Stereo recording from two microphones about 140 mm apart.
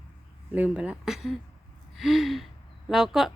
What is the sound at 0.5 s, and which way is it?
Speech, 5° right (ahead or behind).